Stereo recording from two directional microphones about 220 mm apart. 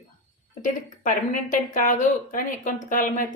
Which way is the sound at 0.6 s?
35° left (ahead or behind).